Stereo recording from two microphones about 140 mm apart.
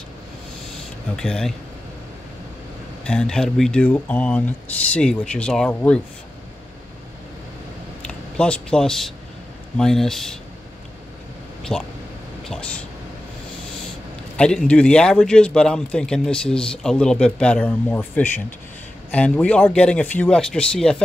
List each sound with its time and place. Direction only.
1.1 s a man's voice: 5° left (ahead or behind)
3.0 s a man's voice: 5° left (ahead or behind)
8.0 s a man's voice: 5° left (ahead or behind)
11.7 s a man's voice: 5° left (ahead or behind)
14.3 s a man's voice: 5° left (ahead or behind)